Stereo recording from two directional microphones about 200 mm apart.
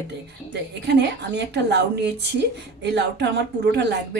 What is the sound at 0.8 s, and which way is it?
A woman's voice, 55° right (ahead or behind).